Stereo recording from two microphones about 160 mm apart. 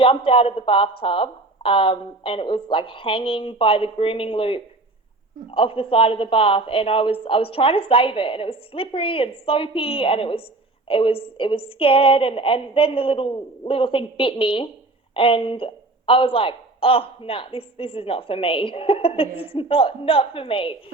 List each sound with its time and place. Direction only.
0.3 s a woman's voice: 35° left (ahead or behind)